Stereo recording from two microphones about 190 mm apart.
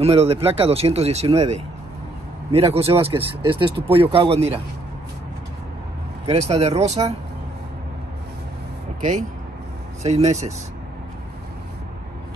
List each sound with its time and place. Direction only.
0.0 s speech: 30° right (ahead or behind)
2.7 s speech: 30° right (ahead or behind)
6.2 s speech: 35° right (ahead or behind)
10.0 s speech: 35° right (ahead or behind)